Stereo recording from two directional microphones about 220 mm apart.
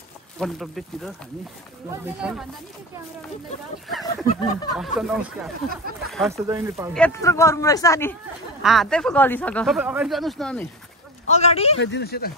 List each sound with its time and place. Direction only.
0.4 s speech: centre (ahead or behind)
4.3 s speech: 25° left (ahead or behind)
4.7 s speech: centre (ahead or behind)
6.0 s a sound: centre (ahead or behind)
6.3 s speech: 15° right (ahead or behind)
6.9 s speech: 10° left (ahead or behind)
8.6 s speech: centre (ahead or behind)
9.8 s speech: 5° right (ahead or behind)
11.2 s speech: 30° left (ahead or behind)
11.8 s speech: 50° left (ahead or behind)